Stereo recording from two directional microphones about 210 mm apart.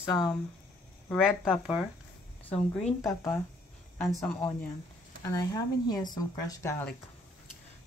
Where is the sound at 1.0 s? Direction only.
5° left (ahead or behind).